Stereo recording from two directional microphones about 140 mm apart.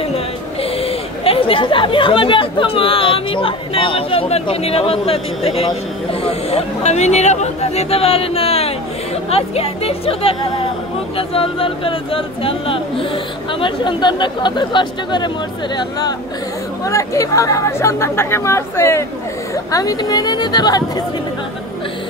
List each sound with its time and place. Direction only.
0.0 s speech: 45° left (ahead or behind); by 21.0 s 30° left (ahead or behind)